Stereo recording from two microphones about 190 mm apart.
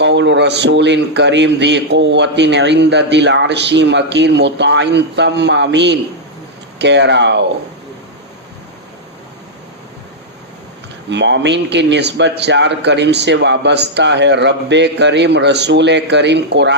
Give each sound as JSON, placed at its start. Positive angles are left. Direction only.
{"t": 0.0, "sound": "speech", "side_deg": -70}
{"t": 11.1, "sound": "speech", "side_deg": -70}